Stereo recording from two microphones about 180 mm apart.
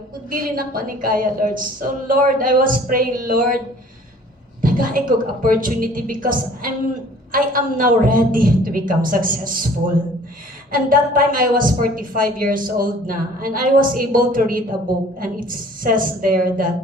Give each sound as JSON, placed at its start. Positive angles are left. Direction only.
{"t": 0.3, "sound": "a woman's voice", "side_deg": -50}
{"t": 4.6, "sound": "a woman's voice", "side_deg": -50}
{"t": 10.7, "sound": "a woman's voice", "side_deg": -50}